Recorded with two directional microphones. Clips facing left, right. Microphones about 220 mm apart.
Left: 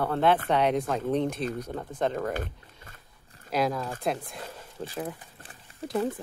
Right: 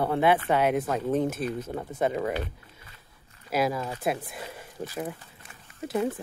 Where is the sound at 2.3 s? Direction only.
45° left (ahead or behind).